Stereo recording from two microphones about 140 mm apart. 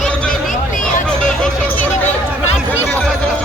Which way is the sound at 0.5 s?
65° left (ahead or behind).